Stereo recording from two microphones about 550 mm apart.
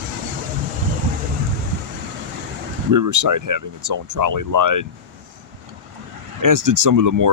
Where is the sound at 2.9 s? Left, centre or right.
Right.